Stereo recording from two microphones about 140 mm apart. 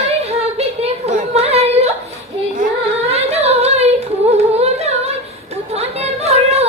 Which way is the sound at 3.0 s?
50° right (ahead or behind).